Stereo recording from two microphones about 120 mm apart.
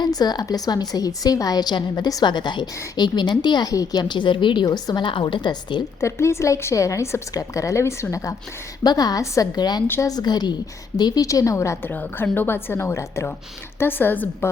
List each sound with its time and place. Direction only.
0.0 s a woman's voice: 35° left (ahead or behind)
6.0 s a woman's voice: 25° left (ahead or behind)
9.8 s a woman's voice: 20° left (ahead or behind)
10.1 s a woman's voice: 35° left (ahead or behind); by 14.5 s 15° left (ahead or behind)